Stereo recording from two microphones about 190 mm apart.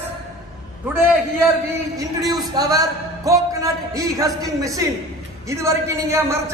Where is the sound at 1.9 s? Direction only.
20° right (ahead or behind).